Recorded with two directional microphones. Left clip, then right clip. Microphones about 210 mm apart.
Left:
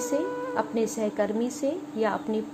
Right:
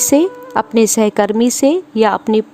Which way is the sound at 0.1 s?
55° right (ahead or behind).